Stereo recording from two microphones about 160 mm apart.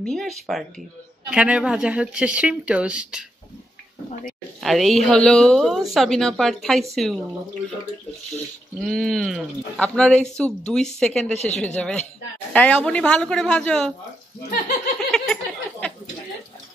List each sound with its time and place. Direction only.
0.0 s a woman's voice: 5° left (ahead or behind)
4.6 s a woman's voice: centre (ahead or behind)
8.8 s a woman's voice: centre (ahead or behind)
11.3 s speech: 45° left (ahead or behind)
11.6 s a woman's voice: 5° left (ahead or behind)
15.0 s a sound: centre (ahead or behind)